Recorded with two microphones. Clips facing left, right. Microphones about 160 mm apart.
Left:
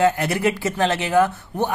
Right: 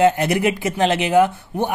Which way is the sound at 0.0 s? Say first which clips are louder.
Right 3 dB; 20° right (ahead or behind).